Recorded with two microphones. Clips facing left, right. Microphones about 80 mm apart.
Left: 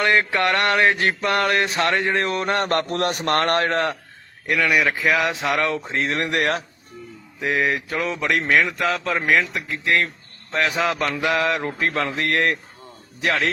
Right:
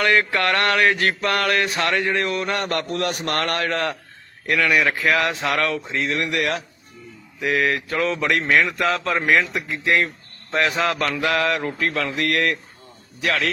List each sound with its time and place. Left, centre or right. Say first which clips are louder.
0.0 s mantra: even; left
4.4 s a man's voice: even; centre
5.3 s mantra: even; centre
5.6 s speech: even; left
7.3 s mantra: right 1 dB; left
8.2 s a man's voice: left 1 dB; centre
10.5 s mantra: right 1 dB; centre; by 13.5 s left